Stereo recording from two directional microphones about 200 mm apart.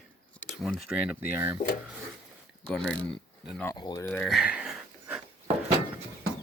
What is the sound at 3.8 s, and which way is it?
Speech, 20° left (ahead or behind).